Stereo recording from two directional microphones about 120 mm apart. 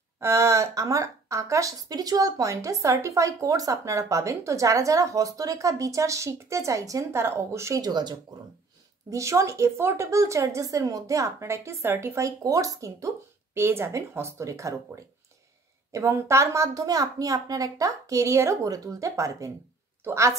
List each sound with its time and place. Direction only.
0.2 s a woman's voice: 25° right (ahead or behind)
15.9 s a woman's voice: 25° right (ahead or behind)